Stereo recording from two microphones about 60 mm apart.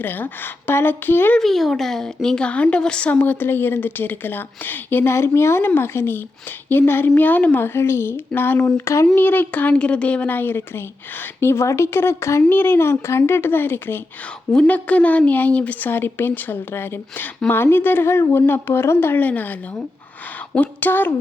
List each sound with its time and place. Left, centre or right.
0.0 s a woman's voice: left
1.4 s a woman's voice: centre
3.1 s a woman's voice: left
7.6 s speech: left
8.3 s a woman's voice: left
8.8 s speech: left
9.1 s speech: left
11.3 s speech: left
12.5 s a woman's voice: left
14.7 s speech: left
15.9 s a woman's voice: left